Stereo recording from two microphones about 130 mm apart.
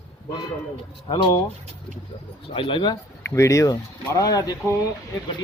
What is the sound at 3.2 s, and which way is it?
A man's voice, 25° left (ahead or behind).